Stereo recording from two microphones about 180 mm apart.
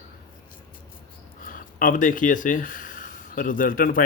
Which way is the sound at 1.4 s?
50° left (ahead or behind).